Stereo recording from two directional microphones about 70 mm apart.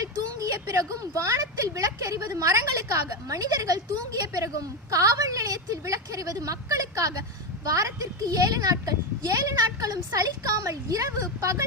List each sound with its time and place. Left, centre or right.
0.0 s a woman's voice: right